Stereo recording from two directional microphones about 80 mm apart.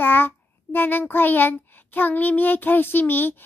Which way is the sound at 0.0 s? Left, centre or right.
Left.